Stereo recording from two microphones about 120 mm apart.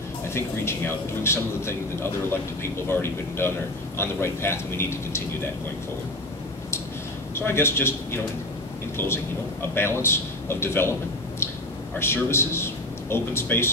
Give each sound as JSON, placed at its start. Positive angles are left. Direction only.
{"t": 0.3, "sound": "a man's voice", "side_deg": 20}
{"t": 2.9, "sound": "a man's voice", "side_deg": 20}
{"t": 7.3, "sound": "a man's voice", "side_deg": 20}
{"t": 12.0, "sound": "a man's voice", "side_deg": 20}